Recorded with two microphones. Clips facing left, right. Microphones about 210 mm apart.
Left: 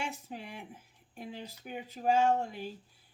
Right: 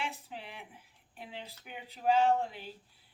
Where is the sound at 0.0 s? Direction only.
45° left (ahead or behind).